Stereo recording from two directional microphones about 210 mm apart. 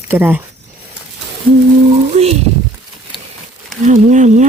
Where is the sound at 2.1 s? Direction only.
30° right (ahead or behind).